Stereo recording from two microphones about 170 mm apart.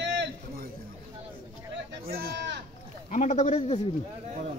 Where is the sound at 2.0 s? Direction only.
65° right (ahead or behind); by 2.6 s 90° right.